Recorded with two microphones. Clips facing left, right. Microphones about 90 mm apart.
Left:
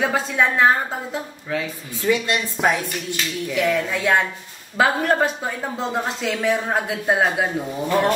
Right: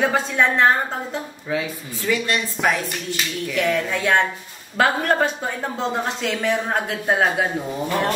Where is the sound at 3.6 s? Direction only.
5° left (ahead or behind).